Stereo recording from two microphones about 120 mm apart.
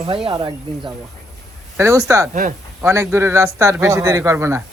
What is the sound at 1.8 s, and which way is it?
Speech, 25° right (ahead or behind).